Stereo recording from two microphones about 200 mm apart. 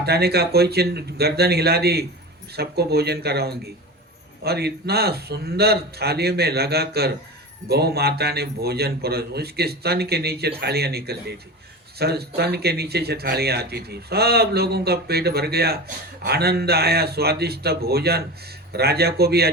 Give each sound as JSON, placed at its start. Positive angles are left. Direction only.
{"t": 0.0, "sound": "speech", "side_deg": -50}